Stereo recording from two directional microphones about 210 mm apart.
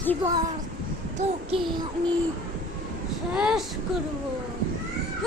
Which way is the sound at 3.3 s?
5° right (ahead or behind).